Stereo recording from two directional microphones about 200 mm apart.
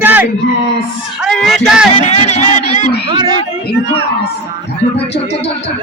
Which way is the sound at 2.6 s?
40° left (ahead or behind).